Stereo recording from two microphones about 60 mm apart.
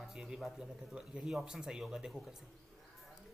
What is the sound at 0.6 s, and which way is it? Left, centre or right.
Speech, centre.